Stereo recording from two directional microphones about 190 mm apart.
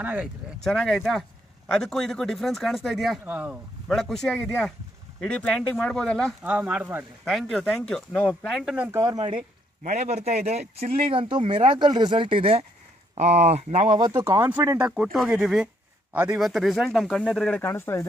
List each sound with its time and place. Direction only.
0.0 s speech: 5° right (ahead or behind)
6.4 s speech: 5° right (ahead or behind)
9.8 s speech: 35° right (ahead or behind)
13.9 s speech: 20° right (ahead or behind); by 18.0 s 15° left (ahead or behind)